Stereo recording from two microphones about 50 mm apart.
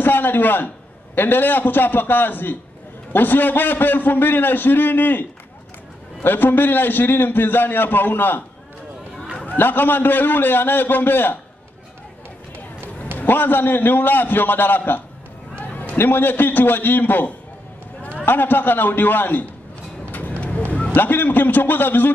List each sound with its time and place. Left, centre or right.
0.0 s a man's voice: left
6.2 s a man's voice: left
9.6 s a man's voice: left
13.2 s a man's voice: left
15.5 s a sound: left
16.0 s a man's voice: left
20.1 s a sound: left
20.9 s a man's voice: left